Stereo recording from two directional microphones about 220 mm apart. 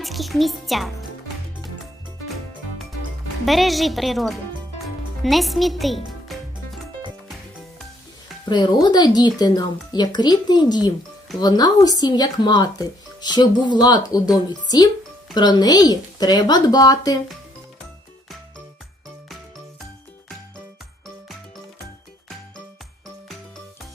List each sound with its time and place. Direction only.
0.0 s a woman's voice: centre (ahead or behind)
3.4 s a woman's voice: centre (ahead or behind)
8.4 s speech: 20° left (ahead or behind)